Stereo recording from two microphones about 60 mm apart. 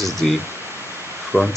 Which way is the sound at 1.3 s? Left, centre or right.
Right.